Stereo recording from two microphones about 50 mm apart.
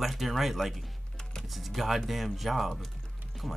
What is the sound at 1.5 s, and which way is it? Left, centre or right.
Speech, centre.